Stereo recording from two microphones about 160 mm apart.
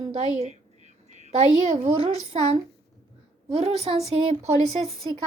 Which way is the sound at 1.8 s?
40° right (ahead or behind).